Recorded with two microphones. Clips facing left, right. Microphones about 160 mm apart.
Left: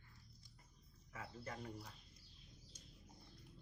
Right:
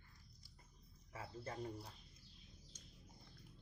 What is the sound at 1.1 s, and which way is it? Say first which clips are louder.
Speech: right 1 dB; 30° right (ahead or behind).